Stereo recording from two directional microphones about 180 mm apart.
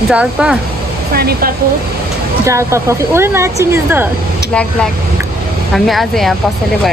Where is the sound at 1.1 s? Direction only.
55° right (ahead or behind).